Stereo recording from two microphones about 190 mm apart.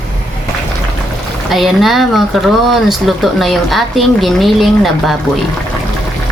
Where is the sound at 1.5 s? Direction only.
Centre (ahead or behind).